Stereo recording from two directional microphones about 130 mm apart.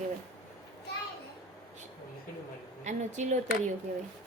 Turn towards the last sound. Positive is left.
turn(degrees=-70)  # may be behind; listen again after turning